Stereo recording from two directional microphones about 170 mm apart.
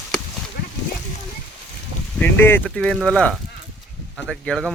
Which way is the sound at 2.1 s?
10° left (ahead or behind).